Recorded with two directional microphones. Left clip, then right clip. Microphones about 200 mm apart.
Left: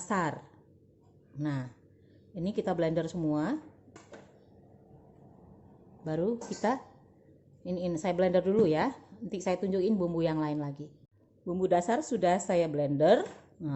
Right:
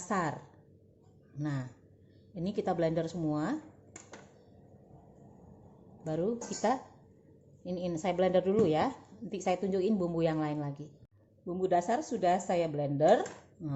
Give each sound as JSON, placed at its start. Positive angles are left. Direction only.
{"t": 0.1, "sound": "a woman's voice", "side_deg": 10}
{"t": 1.4, "sound": "a woman's voice", "side_deg": 10}
{"t": 6.1, "sound": "a woman's voice", "side_deg": 10}